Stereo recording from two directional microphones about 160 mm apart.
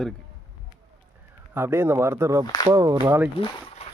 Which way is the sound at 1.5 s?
15° right (ahead or behind).